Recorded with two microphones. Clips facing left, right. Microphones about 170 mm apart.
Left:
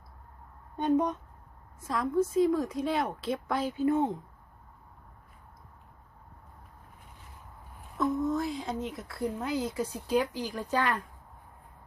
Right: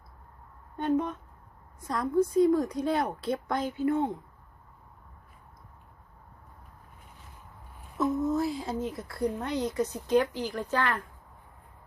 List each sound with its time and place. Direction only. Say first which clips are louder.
0.8 s speech: left 1 dB; 15° left (ahead or behind)
1.9 s a woman's voice: right 2 dB; centre (ahead or behind)
3.8 s speech: left 1 dB; 20° left (ahead or behind)
7.9 s a woman's voice: right 1 dB; 5° right (ahead or behind); by 11.0 s 15° left (ahead or behind)